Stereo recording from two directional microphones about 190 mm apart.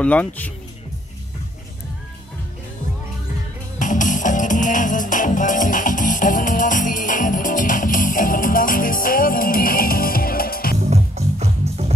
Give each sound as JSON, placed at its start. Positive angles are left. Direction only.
{"t": 0.0, "sound": "speech", "side_deg": 10}
{"t": 3.8, "sound": "music", "side_deg": 40}
{"t": 10.9, "sound": "music", "side_deg": -35}